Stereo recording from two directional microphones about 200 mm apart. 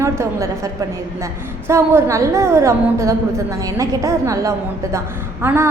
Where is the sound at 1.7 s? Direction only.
15° right (ahead or behind).